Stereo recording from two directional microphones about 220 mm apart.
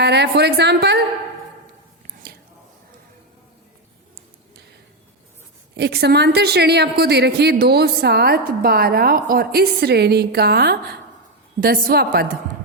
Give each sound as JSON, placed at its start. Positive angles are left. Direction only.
{"t": 0.0, "sound": "a woman's voice", "side_deg": -50}
{"t": 5.7, "sound": "a woman's voice", "side_deg": -45}